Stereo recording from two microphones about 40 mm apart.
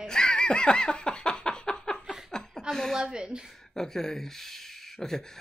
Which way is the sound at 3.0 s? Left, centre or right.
Centre.